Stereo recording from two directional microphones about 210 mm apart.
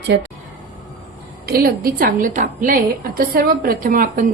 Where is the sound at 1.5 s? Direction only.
45° right (ahead or behind).